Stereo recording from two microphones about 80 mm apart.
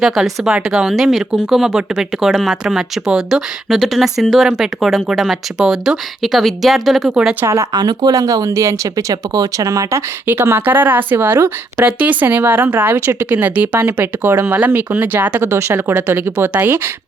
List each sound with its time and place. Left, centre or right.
0.0 s speech: centre
7.1 s speech: centre
7.4 s speech: right
7.7 s speech: right
8.2 s speech: right
10.2 s speech: right
15.4 s speech: right